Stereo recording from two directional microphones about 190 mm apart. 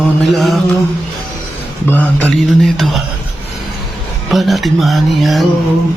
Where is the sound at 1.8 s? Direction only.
10° left (ahead or behind).